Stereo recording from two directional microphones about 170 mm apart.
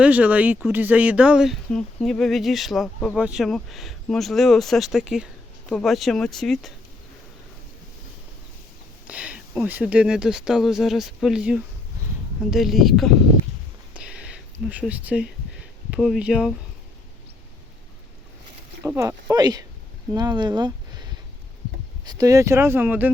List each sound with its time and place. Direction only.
0.0 s speech: 10° right (ahead or behind)
9.0 s speech: 5° right (ahead or behind)
14.0 s a sound: 5° right (ahead or behind)
14.7 s speech: 10° right (ahead or behind)
18.8 s speech: 15° right (ahead or behind)